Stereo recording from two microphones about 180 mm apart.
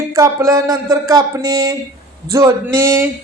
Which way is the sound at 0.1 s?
15° right (ahead or behind).